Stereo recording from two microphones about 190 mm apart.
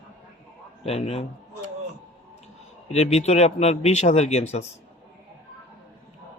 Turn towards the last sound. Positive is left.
turn(degrees=35)  # may be behind; listen again after turning